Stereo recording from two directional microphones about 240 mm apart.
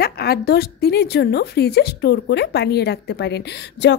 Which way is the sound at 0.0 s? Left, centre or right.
Left.